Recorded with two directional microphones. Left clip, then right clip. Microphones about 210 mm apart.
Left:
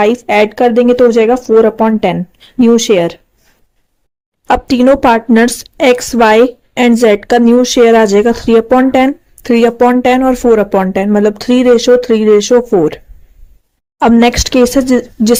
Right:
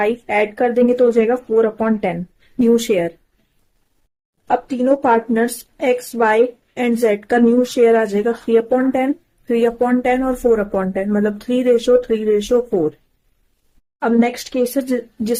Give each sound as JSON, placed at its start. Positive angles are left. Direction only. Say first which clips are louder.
{"t": 0.0, "sound": "a woman's voice", "louder": "left 8 dB", "side_deg": 40}
{"t": 4.4, "sound": "a woman's voice", "louder": "left 8 dB", "side_deg": 45}
{"t": 14.0, "sound": "a woman's voice", "louder": "left 9 dB", "side_deg": 40}